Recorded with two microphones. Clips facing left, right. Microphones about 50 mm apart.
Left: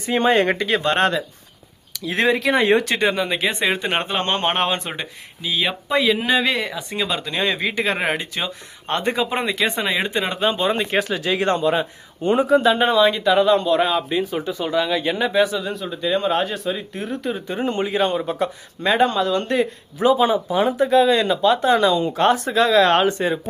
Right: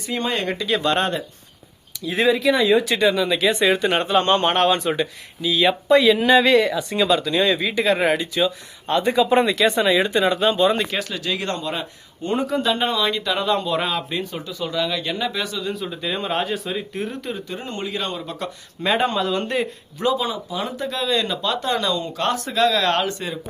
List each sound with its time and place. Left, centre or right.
0.0 s speech: left
2.0 s speech: left
2.8 s speech: left
5.6 s speech: centre
7.2 s speech: left
9.2 s speech: centre
14.4 s speech: left
15.6 s speech: centre
17.5 s speech: left
18.8 s speech: centre
20.1 s speech: left
20.7 s speech: centre